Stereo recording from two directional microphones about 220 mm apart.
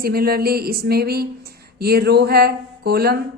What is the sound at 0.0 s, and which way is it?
A woman's voice, 45° right (ahead or behind).